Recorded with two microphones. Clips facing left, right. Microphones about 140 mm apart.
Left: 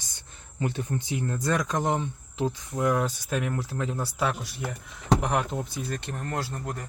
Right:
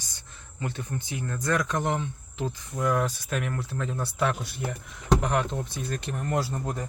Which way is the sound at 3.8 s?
10° left (ahead or behind).